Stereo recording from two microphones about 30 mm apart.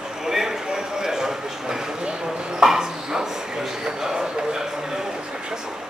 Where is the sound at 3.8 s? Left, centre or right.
Right.